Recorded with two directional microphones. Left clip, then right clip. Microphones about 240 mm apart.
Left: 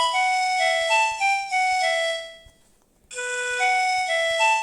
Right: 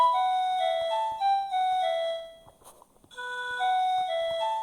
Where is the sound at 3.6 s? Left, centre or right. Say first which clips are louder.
Left 3 dB; left.